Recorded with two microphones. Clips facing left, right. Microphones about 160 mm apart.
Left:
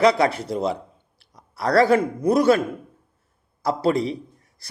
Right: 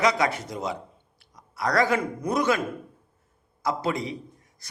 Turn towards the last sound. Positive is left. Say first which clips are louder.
# left 6 dB
turn(degrees=35)  # may be behind; listen again after turning